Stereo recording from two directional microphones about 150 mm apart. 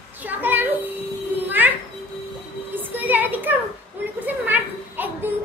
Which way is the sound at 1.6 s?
10° right (ahead or behind).